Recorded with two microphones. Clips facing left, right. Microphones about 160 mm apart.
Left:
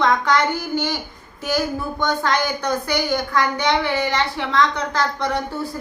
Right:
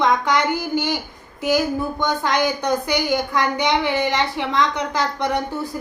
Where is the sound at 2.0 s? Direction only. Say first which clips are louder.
Even; 15° right (ahead or behind).